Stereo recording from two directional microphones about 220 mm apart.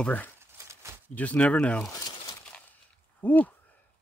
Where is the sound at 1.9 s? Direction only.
15° left (ahead or behind).